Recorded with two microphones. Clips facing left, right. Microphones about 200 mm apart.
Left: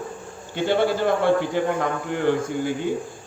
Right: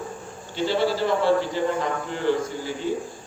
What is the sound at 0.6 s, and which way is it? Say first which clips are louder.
A man's voice: left 2 dB; 55° left (ahead or behind).